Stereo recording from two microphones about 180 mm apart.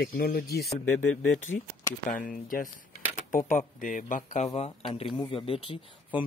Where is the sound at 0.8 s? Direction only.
10° left (ahead or behind).